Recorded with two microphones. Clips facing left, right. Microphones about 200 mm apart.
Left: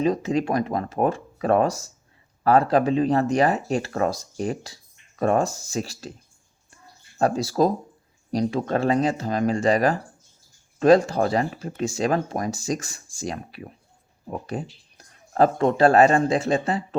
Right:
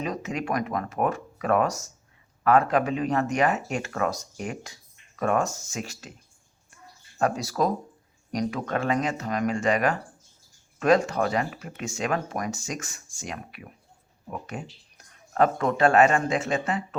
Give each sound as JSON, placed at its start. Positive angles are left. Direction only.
{"t": 0.0, "sound": "speech", "side_deg": 30}
{"t": 7.2, "sound": "speech", "side_deg": 30}